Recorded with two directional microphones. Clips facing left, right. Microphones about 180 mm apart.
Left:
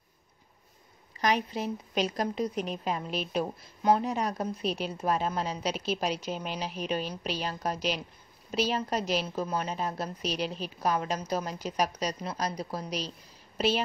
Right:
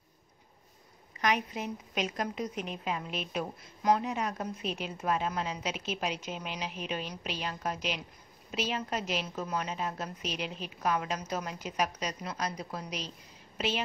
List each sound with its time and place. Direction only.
1.2 s a woman's voice: 35° left (ahead or behind)